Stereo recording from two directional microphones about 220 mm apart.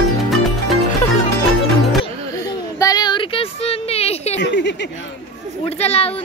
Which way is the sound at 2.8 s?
20° left (ahead or behind).